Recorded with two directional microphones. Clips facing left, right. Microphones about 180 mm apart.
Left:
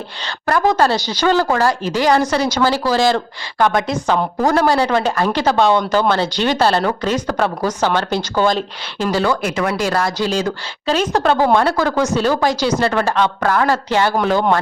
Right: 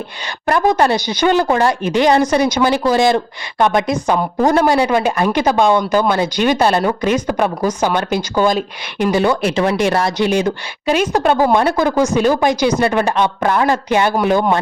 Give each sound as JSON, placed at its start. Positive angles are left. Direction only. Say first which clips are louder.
{"t": 0.4, "sound": "a woman's voice", "louder": "right 1 dB", "side_deg": -20}